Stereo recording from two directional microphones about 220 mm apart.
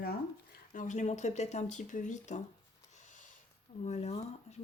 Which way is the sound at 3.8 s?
30° left (ahead or behind).